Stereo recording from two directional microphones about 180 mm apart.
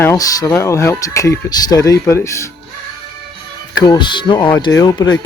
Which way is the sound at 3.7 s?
25° left (ahead or behind).